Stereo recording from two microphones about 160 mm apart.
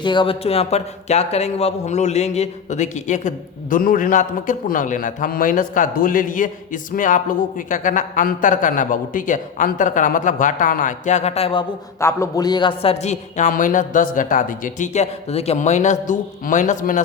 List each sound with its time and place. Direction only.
0.0 s speech: 30° left (ahead or behind)
11.9 s speech: 20° left (ahead or behind); by 17.0 s 50° left (ahead or behind)